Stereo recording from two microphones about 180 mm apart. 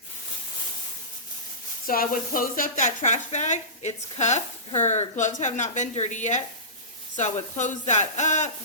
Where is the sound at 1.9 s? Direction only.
50° left (ahead or behind).